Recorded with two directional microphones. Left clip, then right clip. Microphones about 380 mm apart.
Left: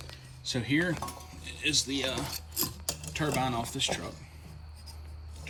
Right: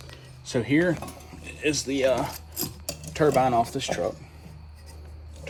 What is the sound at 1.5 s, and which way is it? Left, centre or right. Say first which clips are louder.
Mechanisms: right 3 dB; centre.